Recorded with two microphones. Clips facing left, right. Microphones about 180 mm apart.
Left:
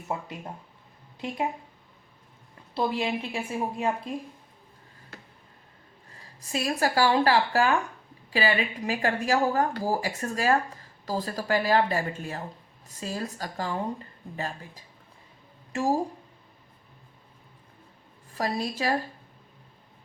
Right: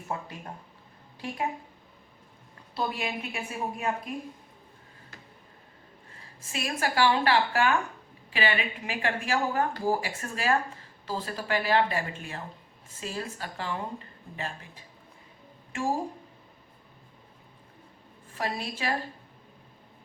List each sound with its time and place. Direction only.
0.1 s a woman's voice: 20° left (ahead or behind)
2.7 s a woman's voice: 25° left (ahead or behind)
6.4 s a woman's voice: 40° left (ahead or behind)
18.3 s a woman's voice: 35° left (ahead or behind)